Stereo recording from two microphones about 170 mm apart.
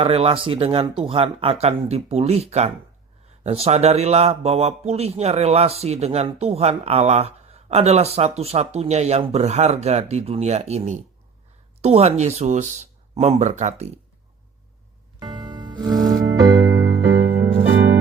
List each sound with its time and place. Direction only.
0.0 s speech: 35° right (ahead or behind)
15.2 s music: 25° right (ahead or behind)
16.9 s music: 80° right